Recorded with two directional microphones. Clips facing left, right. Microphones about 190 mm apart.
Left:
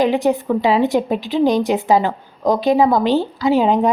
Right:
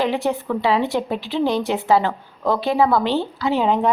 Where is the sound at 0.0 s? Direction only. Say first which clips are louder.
Left 5 dB; 15° left (ahead or behind).